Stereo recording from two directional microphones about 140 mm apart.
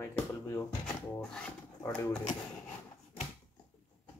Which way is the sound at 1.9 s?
10° left (ahead or behind).